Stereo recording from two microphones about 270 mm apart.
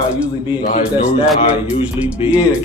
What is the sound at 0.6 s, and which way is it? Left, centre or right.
Speech, centre.